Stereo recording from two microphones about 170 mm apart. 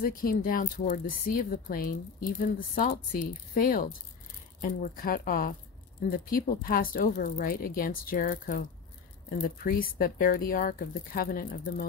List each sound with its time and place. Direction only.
0.0 s speech: 55° left (ahead or behind)